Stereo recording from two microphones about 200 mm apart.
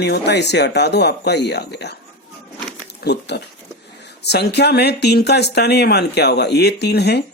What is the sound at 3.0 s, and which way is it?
Speech, 55° left (ahead or behind).